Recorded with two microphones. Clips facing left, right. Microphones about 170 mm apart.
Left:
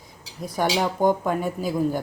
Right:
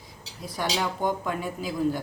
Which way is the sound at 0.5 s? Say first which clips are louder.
Left 5 dB; 50° left (ahead or behind).